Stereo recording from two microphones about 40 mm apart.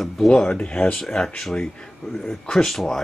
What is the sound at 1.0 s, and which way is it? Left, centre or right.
Speech, centre.